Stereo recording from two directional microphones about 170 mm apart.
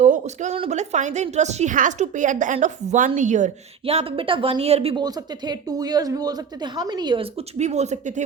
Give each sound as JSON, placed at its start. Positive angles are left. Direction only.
{"t": 0.0, "sound": "a woman's voice", "side_deg": -45}
{"t": 5.0, "sound": "speech", "side_deg": -25}